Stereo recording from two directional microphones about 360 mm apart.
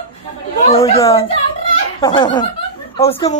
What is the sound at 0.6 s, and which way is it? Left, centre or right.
A woman's voice, centre.